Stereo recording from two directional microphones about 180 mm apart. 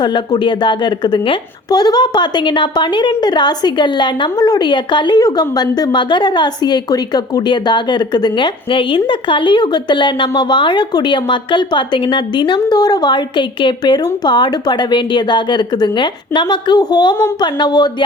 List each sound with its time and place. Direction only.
0.0 s a woman's voice: 25° left (ahead or behind)